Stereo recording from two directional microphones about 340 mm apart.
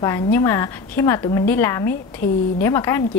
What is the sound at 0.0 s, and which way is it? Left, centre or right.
A woman's voice, centre.